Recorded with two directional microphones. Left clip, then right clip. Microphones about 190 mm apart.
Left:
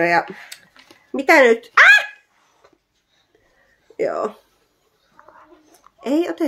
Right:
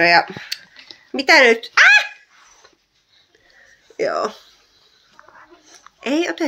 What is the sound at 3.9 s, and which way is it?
Speech, 10° left (ahead or behind).